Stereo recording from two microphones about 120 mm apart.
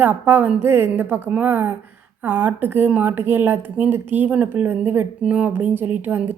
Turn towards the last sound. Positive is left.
turn(degrees=-15)  # may be behind; listen again after turning